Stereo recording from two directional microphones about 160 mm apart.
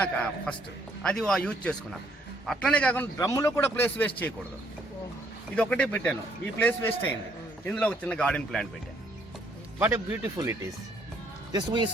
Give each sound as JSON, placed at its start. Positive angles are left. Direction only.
{"t": 0.0, "sound": "a man's voice", "side_deg": 10}
{"t": 5.5, "sound": "a man's voice", "side_deg": 5}
{"t": 9.7, "sound": "speech", "side_deg": -15}